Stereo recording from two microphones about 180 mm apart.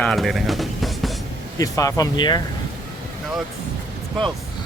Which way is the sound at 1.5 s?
20° left (ahead or behind).